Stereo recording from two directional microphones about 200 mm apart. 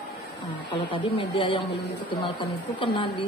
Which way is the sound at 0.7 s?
25° left (ahead or behind).